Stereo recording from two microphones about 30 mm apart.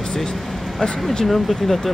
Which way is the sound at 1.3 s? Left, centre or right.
Centre.